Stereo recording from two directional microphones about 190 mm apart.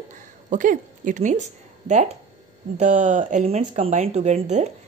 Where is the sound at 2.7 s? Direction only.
35° right (ahead or behind).